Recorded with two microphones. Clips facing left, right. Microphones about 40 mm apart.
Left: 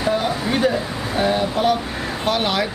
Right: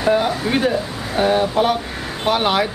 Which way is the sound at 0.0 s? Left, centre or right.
Centre.